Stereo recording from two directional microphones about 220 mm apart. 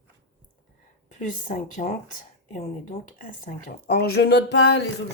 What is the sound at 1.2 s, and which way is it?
Speech, 35° left (ahead or behind).